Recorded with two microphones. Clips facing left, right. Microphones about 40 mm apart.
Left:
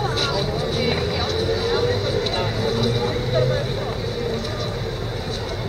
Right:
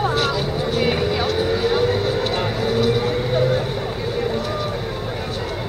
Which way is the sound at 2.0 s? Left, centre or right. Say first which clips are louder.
Right 2 dB; centre.